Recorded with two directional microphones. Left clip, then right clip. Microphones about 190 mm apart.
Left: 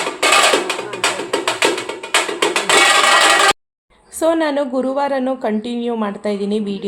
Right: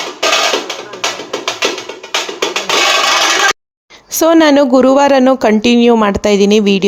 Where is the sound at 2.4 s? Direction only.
45° left (ahead or behind).